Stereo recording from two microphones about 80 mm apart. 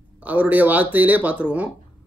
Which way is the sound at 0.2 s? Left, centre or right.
Centre.